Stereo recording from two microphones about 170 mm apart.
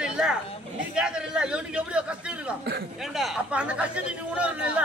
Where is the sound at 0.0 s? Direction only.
5° right (ahead or behind).